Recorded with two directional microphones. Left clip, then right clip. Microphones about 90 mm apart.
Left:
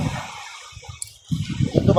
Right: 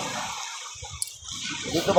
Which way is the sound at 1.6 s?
35° left (ahead or behind).